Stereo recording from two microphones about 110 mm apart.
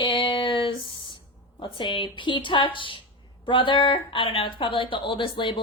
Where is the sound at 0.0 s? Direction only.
50° left (ahead or behind).